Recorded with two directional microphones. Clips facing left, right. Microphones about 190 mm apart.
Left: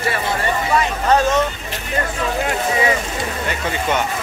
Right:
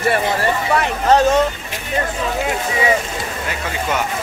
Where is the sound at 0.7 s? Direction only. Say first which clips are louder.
Left 1 dB; 65° right (ahead or behind).